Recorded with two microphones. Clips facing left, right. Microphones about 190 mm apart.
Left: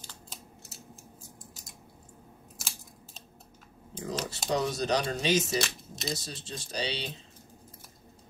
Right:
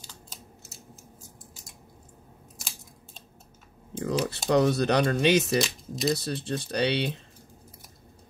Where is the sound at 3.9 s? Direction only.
60° right (ahead or behind).